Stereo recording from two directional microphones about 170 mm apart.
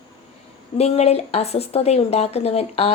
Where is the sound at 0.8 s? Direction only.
40° left (ahead or behind).